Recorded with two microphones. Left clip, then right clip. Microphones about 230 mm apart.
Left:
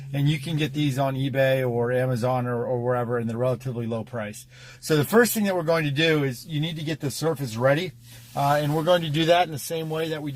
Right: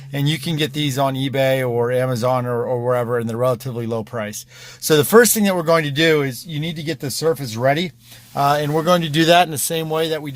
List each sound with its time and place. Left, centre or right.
0.1 s speech: right